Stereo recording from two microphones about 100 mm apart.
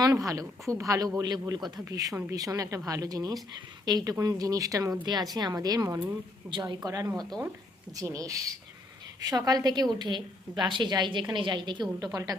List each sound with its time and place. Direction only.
0.0 s a woman's voice: 35° right (ahead or behind)
6.5 s a woman's voice: 50° right (ahead or behind)
6.7 s a woman's voice: 35° right (ahead or behind)